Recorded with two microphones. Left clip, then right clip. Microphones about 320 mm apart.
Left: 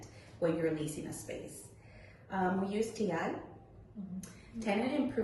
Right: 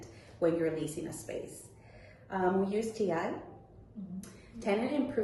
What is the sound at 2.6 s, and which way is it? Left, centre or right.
Speech, centre.